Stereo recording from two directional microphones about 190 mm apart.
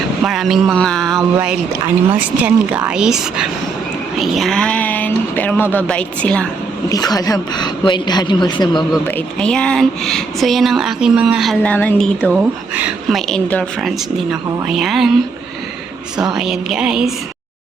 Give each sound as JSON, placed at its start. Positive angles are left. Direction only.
{"t": 0.2, "sound": "speech", "side_deg": 0}
{"t": 2.0, "sound": "speech", "side_deg": -10}
{"t": 6.9, "sound": "a woman's voice", "side_deg": 20}
{"t": 9.0, "sound": "speech", "side_deg": 5}
{"t": 12.4, "sound": "speech", "side_deg": -10}
{"t": 16.3, "sound": "speech", "side_deg": -5}